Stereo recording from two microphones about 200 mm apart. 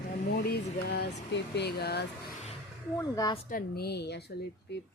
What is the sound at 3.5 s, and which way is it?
Speech, 45° left (ahead or behind).